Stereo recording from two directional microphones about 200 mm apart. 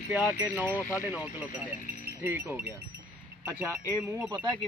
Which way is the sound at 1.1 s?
5° right (ahead or behind).